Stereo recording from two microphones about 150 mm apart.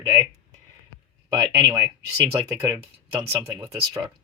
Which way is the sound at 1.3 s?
25° right (ahead or behind).